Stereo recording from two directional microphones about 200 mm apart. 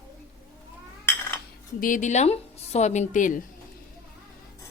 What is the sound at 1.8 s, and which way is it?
A woman's voice, 40° left (ahead or behind).